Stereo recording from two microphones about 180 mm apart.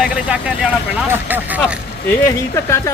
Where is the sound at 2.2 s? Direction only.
15° left (ahead or behind).